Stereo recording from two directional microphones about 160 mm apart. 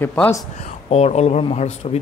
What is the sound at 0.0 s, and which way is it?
Speech, 10° left (ahead or behind).